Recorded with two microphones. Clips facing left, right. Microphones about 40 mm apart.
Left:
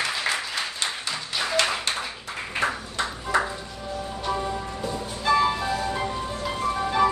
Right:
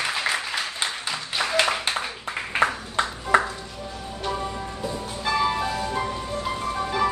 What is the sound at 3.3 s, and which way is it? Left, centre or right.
Music, right.